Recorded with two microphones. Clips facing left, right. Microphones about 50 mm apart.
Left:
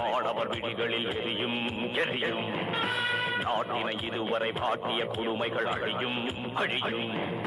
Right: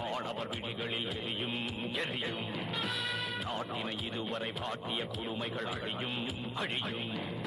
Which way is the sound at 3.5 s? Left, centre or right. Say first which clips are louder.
Left 7 dB; left.